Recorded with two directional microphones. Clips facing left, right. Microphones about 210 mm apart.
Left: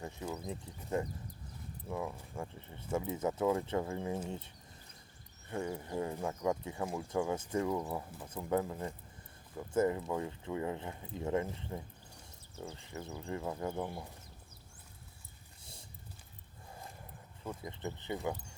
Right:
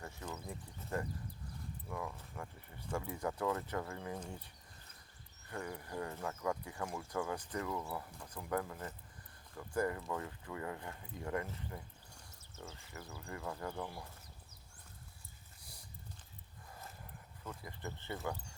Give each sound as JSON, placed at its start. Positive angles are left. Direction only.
{"t": 0.0, "sound": "speech", "side_deg": 15}
{"t": 15.6, "sound": "horse", "side_deg": 25}
{"t": 17.4, "sound": "speech", "side_deg": 25}